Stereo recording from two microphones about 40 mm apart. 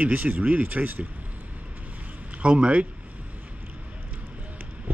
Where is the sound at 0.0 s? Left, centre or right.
Right.